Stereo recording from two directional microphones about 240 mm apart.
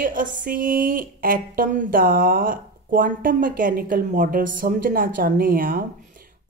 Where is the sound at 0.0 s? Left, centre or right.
Right.